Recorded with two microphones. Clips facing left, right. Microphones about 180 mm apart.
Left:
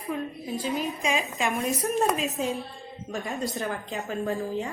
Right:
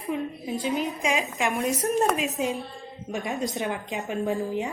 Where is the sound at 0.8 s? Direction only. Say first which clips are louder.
Right 1 dB; 20° right (ahead or behind).